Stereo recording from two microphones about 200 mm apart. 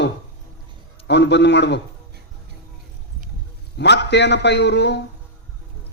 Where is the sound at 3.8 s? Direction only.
60° left (ahead or behind).